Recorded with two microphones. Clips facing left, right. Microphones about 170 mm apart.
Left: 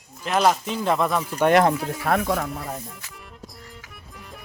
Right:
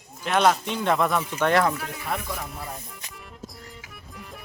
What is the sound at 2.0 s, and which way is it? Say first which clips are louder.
Speech: left 9 dB; 65° left (ahead or behind).